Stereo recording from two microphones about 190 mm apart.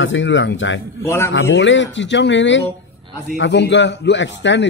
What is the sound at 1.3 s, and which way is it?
A man's voice, 75° left (ahead or behind).